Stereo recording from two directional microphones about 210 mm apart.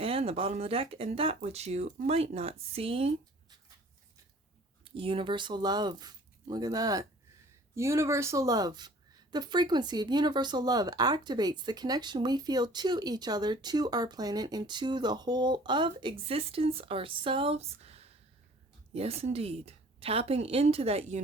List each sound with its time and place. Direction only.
0.0 s a woman's voice: 25° right (ahead or behind)
4.9 s a woman's voice: 25° right (ahead or behind)